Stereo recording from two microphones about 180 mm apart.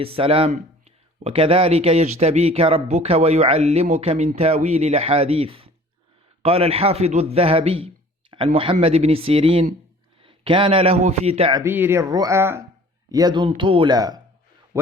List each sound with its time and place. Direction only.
0.0 s speech: 30° right (ahead or behind)
11.6 s speech: 10° right (ahead or behind)